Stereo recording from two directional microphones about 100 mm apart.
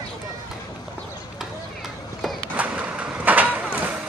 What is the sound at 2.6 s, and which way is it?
Vehicle, 15° right (ahead or behind).